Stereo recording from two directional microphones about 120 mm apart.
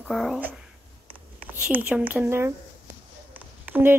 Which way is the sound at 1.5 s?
15° right (ahead or behind).